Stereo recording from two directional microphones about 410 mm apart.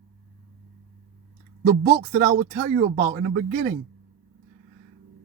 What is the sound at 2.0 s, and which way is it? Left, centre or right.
Speech, right.